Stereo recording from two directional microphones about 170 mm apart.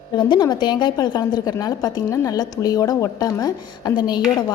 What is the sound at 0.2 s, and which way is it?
A woman's voice, 25° left (ahead or behind).